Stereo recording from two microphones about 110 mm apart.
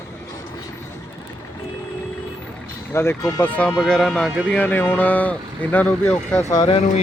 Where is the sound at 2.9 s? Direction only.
25° left (ahead or behind); by 4.3 s 5° left (ahead or behind).